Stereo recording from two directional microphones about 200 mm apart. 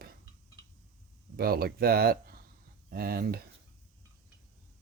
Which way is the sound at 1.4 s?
50° right (ahead or behind).